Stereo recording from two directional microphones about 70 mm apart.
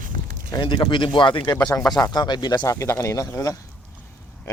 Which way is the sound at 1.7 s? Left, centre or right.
Left.